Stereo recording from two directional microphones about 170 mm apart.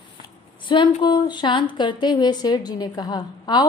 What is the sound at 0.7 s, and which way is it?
A woman's voice, 25° left (ahead or behind).